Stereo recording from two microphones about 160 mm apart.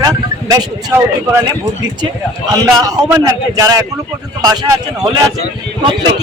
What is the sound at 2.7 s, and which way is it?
A man's voice, 25° right (ahead or behind).